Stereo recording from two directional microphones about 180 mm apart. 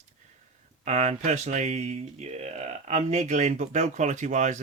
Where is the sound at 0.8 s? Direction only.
40° right (ahead or behind).